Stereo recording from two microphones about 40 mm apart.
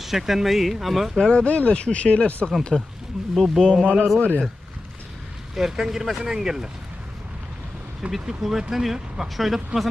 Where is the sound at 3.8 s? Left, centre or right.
Left.